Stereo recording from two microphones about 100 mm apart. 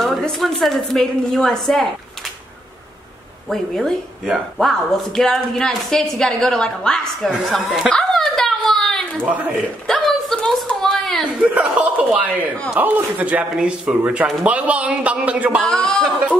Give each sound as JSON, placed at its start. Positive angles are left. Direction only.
{"t": 0.0, "sound": "a woman's voice", "side_deg": 0}
{"t": 3.4, "sound": "a woman's voice", "side_deg": 0}
{"t": 7.9, "sound": "a sound", "side_deg": 5}
{"t": 11.4, "sound": "speech", "side_deg": -15}
{"t": 15.6, "sound": "a woman's voice", "side_deg": 5}